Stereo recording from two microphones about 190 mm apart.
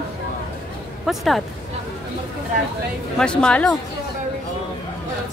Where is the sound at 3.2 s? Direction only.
5° left (ahead or behind).